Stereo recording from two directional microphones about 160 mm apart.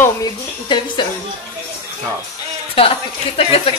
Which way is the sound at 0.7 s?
30° left (ahead or behind).